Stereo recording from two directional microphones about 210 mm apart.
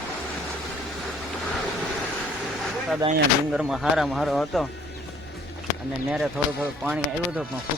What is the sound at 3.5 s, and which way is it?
Speech, 5° right (ahead or behind).